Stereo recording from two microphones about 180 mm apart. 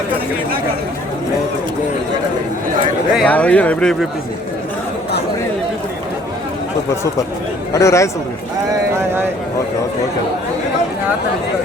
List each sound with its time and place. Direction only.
3.2 s speech: 10° left (ahead or behind)
7.7 s speech: 15° left (ahead or behind)